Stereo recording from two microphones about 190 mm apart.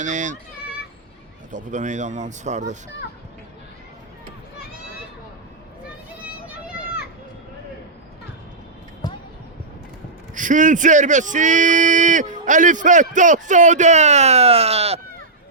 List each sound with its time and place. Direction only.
0.0 s a man's voice: 40° right (ahead or behind)
1.5 s a man's voice: 40° right (ahead or behind)
6.7 s children playing: 5° right (ahead or behind)
9.0 s basketball bounce: 20° left (ahead or behind)
10.3 s a man's voice: 45° right (ahead or behind)